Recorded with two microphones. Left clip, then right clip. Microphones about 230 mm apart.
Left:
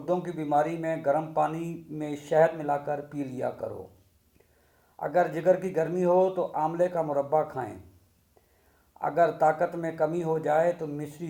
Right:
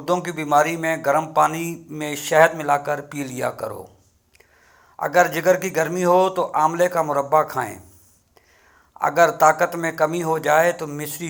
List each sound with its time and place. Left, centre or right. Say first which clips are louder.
0.0 s a man's voice: right 7 dB; centre
3.6 s speech: right 6 dB; centre
4.9 s a man's voice: right 8 dB; centre
9.0 s a man's voice: right 8 dB; centre